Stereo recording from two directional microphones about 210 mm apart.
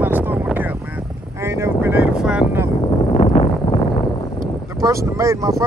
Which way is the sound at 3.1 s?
30° left (ahead or behind).